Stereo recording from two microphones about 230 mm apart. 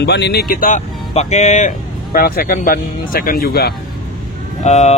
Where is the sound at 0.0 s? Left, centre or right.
Left.